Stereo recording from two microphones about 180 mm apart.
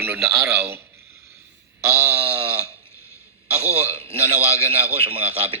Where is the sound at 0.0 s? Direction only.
10° right (ahead or behind).